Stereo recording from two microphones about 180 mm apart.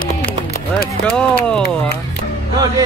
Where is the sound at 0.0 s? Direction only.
55° left (ahead or behind).